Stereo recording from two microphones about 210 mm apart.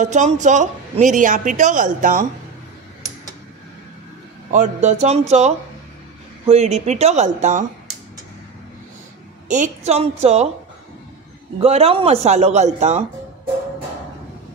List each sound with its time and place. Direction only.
0.0 s a woman's voice: 35° right (ahead or behind)
4.5 s a woman's voice: 35° right (ahead or behind)
9.5 s a woman's voice: 35° right (ahead or behind)
11.5 s a woman's voice: 30° right (ahead or behind)